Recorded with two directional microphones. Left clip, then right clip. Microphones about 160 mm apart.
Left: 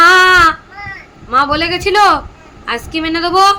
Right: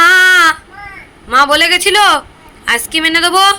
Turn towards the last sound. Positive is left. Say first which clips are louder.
# right 2 dB
turn(degrees=0)  # may be behind; listen again after turning